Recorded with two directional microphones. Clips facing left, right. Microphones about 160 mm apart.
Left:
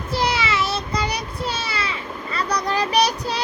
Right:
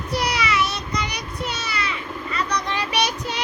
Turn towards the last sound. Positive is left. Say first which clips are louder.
# left 4 dB
turn(degrees=35)  # may be behind; listen again after turning